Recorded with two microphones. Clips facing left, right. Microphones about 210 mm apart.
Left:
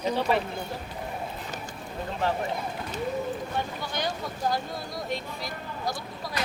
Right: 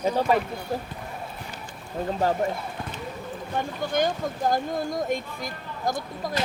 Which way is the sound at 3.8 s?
45° right (ahead or behind).